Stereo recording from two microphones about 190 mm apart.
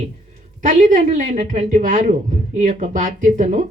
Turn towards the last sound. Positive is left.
turn(degrees=-40)  # may be behind; listen again after turning